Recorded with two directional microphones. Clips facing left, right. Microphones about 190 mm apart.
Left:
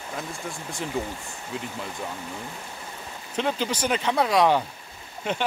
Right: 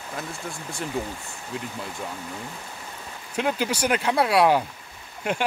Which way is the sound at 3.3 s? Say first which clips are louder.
Right 1 dB; 10° right (ahead or behind).